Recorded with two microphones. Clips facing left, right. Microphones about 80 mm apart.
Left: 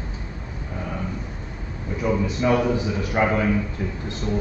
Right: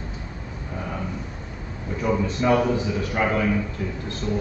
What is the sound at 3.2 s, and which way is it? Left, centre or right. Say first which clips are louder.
Speech: left 3 dB; centre.